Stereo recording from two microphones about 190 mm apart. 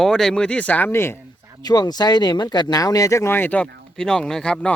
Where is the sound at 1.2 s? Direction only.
15° right (ahead or behind).